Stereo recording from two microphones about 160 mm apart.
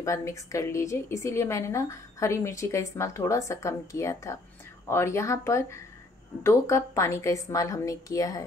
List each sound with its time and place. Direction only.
0.0 s a woman's voice: 20° left (ahead or behind)